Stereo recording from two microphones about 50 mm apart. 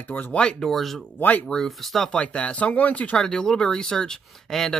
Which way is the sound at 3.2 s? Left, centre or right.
Centre.